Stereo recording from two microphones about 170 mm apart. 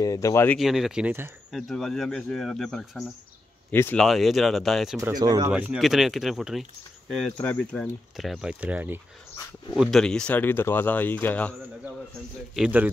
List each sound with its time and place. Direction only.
0.0 s speech: 20° left (ahead or behind)
0.6 s speech: centre (ahead or behind)
1.5 s speech: centre (ahead or behind)
3.7 s speech: 15° left (ahead or behind)
4.0 s speech: centre (ahead or behind)
5.1 s speech: 20° right (ahead or behind)
5.5 s speech: 5° right (ahead or behind)
9.8 s speech: centre (ahead or behind)
12.5 s a man's voice: 5° right (ahead or behind)